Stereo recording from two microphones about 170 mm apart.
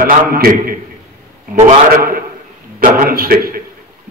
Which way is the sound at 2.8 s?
50° right (ahead or behind).